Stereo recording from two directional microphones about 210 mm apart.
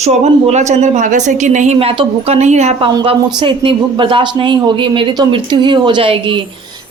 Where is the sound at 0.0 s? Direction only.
35° right (ahead or behind).